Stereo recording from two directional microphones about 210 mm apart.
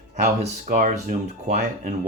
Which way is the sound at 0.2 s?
40° right (ahead or behind).